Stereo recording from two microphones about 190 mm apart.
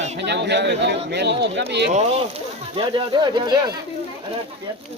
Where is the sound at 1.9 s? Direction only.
30° right (ahead or behind).